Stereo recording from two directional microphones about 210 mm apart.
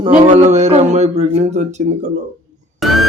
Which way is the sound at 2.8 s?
Centre (ahead or behind).